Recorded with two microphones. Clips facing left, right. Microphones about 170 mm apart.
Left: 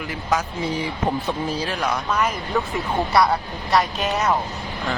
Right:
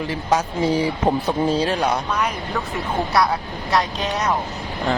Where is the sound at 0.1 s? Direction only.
30° right (ahead or behind).